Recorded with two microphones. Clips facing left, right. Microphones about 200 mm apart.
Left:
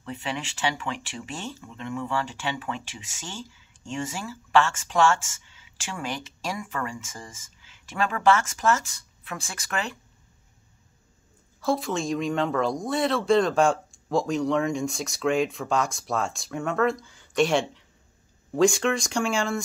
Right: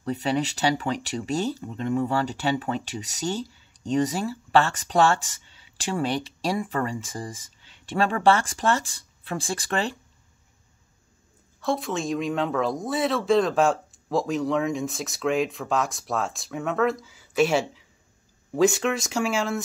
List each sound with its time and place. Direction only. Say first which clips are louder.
0.0 s speech: right 8 dB; 40° right (ahead or behind)
11.6 s speech: left 1 dB; centre (ahead or behind)